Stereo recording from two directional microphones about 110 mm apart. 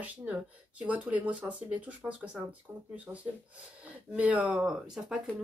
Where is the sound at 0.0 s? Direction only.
15° right (ahead or behind).